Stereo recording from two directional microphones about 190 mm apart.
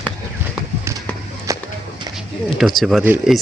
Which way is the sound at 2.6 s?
Centre (ahead or behind).